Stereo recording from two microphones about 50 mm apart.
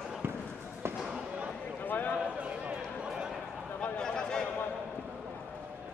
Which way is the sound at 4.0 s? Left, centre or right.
Centre.